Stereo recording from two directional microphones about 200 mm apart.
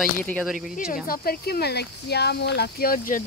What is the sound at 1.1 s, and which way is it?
Speech, 50° left (ahead or behind).